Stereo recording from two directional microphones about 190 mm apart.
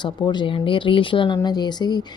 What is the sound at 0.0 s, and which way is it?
A woman's voice, 25° left (ahead or behind).